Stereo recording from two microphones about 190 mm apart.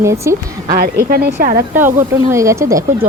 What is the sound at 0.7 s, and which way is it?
Speech, 55° right (ahead or behind).